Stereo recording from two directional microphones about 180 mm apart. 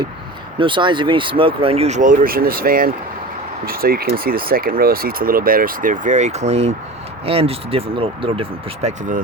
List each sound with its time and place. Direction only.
0.6 s speech: 25° right (ahead or behind); by 9.2 s 40° right (ahead or behind)